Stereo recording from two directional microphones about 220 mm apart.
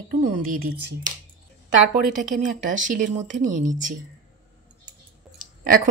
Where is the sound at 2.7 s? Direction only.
35° right (ahead or behind).